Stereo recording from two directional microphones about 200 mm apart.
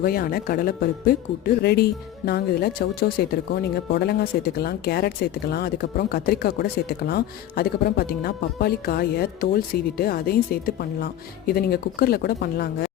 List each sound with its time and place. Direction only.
0.0 s speech: 45° left (ahead or behind)